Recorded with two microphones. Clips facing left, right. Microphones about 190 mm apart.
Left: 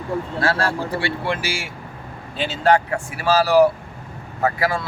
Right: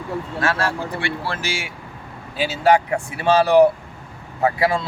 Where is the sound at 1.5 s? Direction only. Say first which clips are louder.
Even; centre (ahead or behind).